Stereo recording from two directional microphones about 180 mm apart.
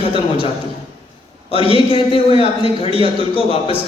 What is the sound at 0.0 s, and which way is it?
Speech, 30° left (ahead or behind).